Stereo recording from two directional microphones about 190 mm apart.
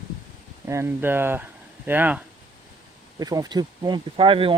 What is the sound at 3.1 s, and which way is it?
Speech, 20° right (ahead or behind).